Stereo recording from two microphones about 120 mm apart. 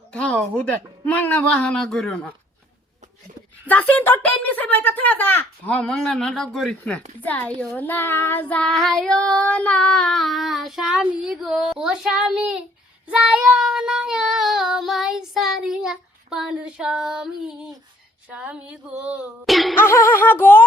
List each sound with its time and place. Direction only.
0.1 s speech: 10° left (ahead or behind)
3.7 s speech: 15° left (ahead or behind)
7.2 s speech: 15° left (ahead or behind)
7.8 s child singing: 15° left (ahead or behind); by 17.7 s 5° right (ahead or behind)
18.3 s speech: 10° right (ahead or behind)
19.5 s child singing: centre (ahead or behind)
19.7 s speech: 20° left (ahead or behind)